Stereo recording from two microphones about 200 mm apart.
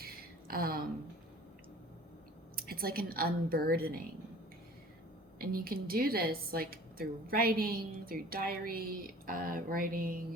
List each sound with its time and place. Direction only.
0.0 s a sound: 50° right (ahead or behind)
2.6 s a woman's voice: 50° right (ahead or behind)
5.4 s a woman's voice: 50° right (ahead or behind)